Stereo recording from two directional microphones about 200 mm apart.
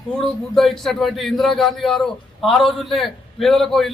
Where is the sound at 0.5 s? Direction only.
Centre (ahead or behind).